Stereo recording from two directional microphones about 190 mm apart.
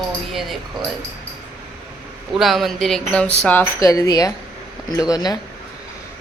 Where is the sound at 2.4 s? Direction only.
Centre (ahead or behind); by 5.3 s 20° left (ahead or behind).